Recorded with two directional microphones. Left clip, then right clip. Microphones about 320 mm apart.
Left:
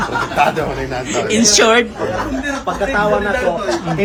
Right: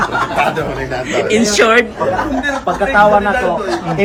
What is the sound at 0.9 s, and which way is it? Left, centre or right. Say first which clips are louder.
Speech: right 6 dB; centre.